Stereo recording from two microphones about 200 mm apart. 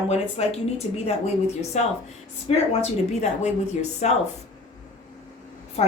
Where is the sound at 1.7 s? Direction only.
35° left (ahead or behind).